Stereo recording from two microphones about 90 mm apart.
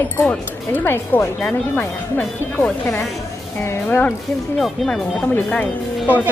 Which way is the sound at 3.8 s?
15° left (ahead or behind).